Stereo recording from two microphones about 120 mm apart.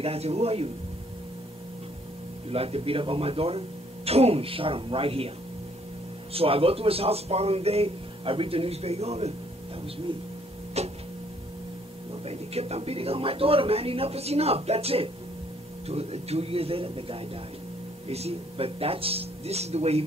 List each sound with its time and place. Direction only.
0.0 s speech: 55° right (ahead or behind)
2.5 s speech: 55° right (ahead or behind)
6.3 s speech: 50° right (ahead or behind)
10.8 s a sound: 65° right (ahead or behind)
12.1 s speech: 60° right (ahead or behind)